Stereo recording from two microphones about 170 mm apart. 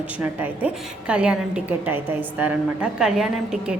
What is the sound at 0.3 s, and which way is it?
A woman's voice, 10° right (ahead or behind).